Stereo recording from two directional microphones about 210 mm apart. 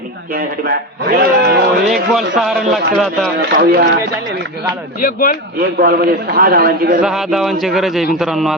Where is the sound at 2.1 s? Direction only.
Centre (ahead or behind).